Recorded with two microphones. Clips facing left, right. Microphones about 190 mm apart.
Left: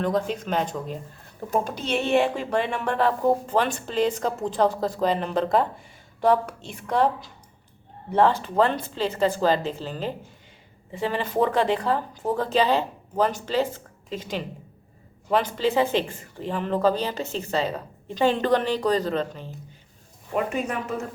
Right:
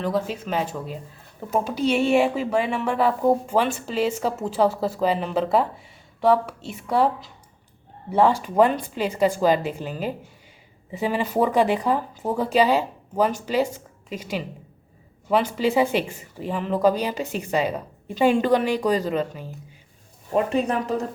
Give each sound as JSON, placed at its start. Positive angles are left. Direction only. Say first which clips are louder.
{"t": 0.0, "sound": "a woman's voice", "louder": "even", "side_deg": -5}
{"t": 20.3, "sound": "speech", "louder": "right 4 dB", "side_deg": -35}